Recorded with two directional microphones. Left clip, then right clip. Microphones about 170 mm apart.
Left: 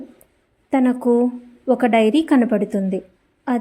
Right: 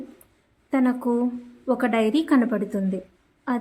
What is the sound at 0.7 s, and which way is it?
A woman's voice, 20° left (ahead or behind).